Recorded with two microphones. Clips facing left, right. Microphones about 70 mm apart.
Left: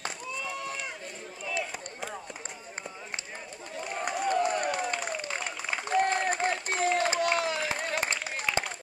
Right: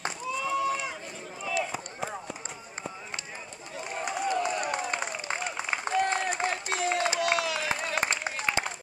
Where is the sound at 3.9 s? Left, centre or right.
Left.